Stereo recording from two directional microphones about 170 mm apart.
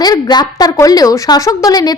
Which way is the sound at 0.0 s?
25° left (ahead or behind).